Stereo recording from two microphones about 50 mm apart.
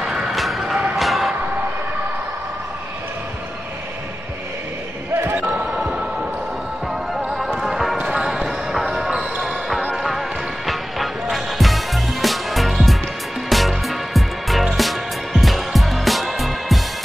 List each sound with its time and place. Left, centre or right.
0.0 s music: centre
0.9 s a sound: centre
5.7 s music: centre
7.2 s music: centre
9.4 s basketball bounce: centre
9.9 s music: centre